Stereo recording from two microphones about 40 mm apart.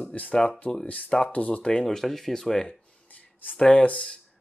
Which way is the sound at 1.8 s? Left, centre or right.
Centre.